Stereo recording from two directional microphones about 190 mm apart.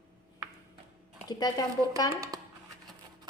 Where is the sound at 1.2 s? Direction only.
20° left (ahead or behind).